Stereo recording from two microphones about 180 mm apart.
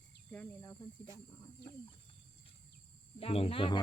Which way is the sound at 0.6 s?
20° left (ahead or behind).